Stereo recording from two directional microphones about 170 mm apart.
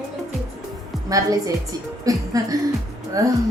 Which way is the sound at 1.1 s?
20° right (ahead or behind).